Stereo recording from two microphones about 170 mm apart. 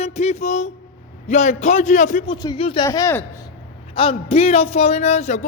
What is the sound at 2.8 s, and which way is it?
Speech, 15° left (ahead or behind).